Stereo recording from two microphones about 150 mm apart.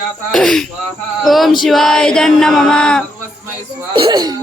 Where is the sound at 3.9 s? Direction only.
30° right (ahead or behind).